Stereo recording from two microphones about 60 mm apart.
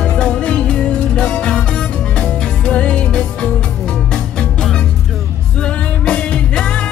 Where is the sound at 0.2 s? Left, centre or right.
Centre.